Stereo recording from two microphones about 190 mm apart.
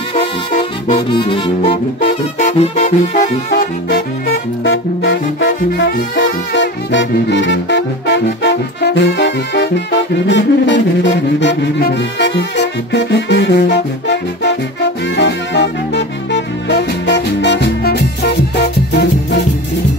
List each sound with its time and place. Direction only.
0.8 s saxophone: 25° left (ahead or behind)
1.7 s music: 60° left (ahead or behind)
2.4 s music: 40° left (ahead or behind)
3.4 s music: 50° left (ahead or behind)
4.6 s music: 90° left
5.7 s music: 55° left (ahead or behind)
6.1 s music: 70° left (ahead or behind)